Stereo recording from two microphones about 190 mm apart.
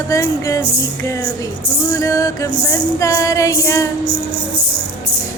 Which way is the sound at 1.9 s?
15° left (ahead or behind).